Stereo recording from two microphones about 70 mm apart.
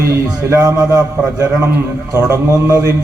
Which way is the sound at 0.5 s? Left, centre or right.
Right.